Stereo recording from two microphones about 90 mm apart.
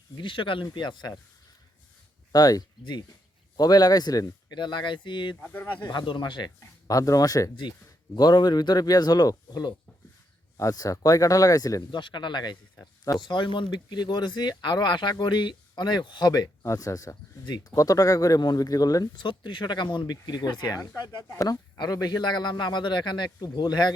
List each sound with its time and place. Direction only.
0.2 s speech: 70° left (ahead or behind); by 1.2 s 50° left (ahead or behind)
2.3 s a man's voice: 45° left (ahead or behind); by 5.4 s 60° left (ahead or behind)
5.4 s speech: 20° left (ahead or behind)
5.8 s speech: 55° left (ahead or behind)
6.6 s speech: 40° left (ahead or behind)
8.1 s a man's voice: 55° left (ahead or behind)
11.9 s a man's voice: 60° left (ahead or behind); by 17.2 s 40° left (ahead or behind)
17.4 s a man's voice: 55° left (ahead or behind)
17.7 s speech: 40° left (ahead or behind)
19.1 s a man's voice: 60° left (ahead or behind)